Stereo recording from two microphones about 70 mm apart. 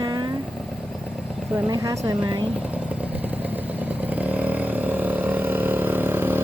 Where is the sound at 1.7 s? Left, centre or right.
Right.